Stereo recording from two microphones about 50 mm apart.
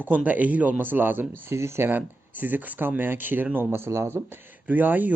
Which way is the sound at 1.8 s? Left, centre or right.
Right.